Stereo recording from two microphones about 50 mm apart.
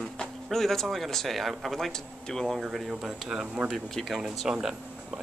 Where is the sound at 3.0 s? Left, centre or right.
Centre.